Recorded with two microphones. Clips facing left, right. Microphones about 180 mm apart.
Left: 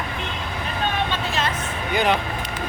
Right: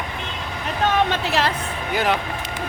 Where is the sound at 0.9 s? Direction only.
80° right.